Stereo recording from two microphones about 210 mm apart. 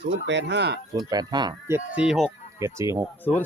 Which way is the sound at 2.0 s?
Centre (ahead or behind).